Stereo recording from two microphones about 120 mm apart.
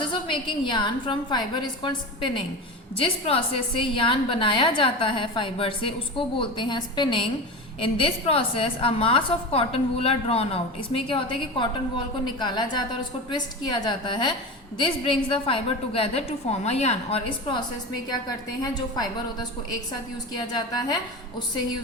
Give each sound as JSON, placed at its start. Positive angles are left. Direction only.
{"t": 0.0, "sound": "a woman's voice", "side_deg": 45}
{"t": 18.1, "sound": "a woman's voice", "side_deg": 35}